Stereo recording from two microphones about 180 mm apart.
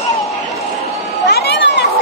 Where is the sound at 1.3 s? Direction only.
65° left (ahead or behind).